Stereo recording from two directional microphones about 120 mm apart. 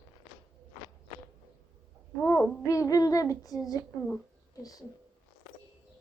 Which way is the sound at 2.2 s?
25° left (ahead or behind).